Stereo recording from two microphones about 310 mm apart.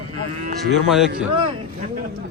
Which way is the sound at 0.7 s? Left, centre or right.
Centre.